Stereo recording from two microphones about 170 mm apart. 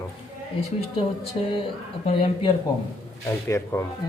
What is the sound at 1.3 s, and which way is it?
Speech, 35° left (ahead or behind).